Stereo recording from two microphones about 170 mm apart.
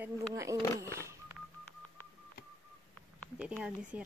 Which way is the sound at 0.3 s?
20° right (ahead or behind).